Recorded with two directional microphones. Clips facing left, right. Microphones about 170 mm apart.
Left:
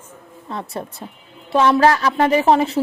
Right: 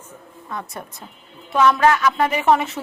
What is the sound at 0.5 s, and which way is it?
A woman's voice, 30° left (ahead or behind).